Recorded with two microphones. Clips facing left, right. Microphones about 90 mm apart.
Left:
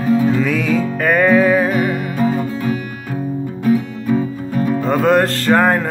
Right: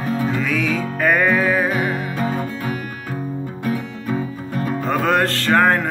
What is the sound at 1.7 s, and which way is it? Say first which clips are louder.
Music: left 4 dB; 20° right (ahead or behind).